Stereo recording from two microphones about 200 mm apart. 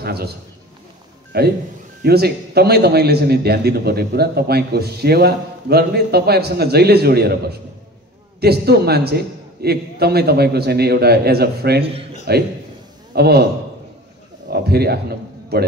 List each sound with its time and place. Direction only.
0.0 s a man's voice: 50° right (ahead or behind)
1.3 s a man's voice: 50° right (ahead or behind)
14.5 s a man's voice: 50° right (ahead or behind)